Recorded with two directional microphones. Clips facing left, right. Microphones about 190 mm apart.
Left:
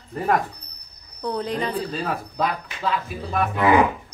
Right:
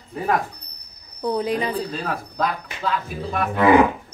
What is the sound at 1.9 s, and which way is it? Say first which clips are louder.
A woman's voice: even; 5° left (ahead or behind).